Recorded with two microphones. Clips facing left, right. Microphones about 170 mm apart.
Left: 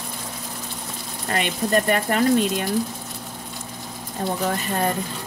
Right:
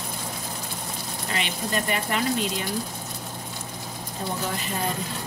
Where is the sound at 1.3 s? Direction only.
50° left (ahead or behind).